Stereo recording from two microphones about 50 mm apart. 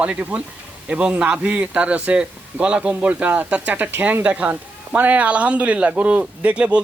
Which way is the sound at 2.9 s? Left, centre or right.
Right.